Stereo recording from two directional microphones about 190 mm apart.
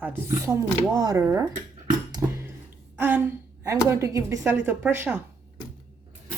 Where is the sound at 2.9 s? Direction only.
10° right (ahead or behind).